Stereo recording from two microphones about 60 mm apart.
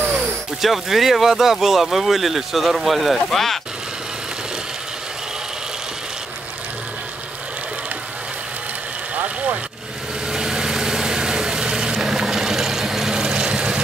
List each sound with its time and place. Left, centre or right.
0.1 s speech: centre
9.1 s vehicle: centre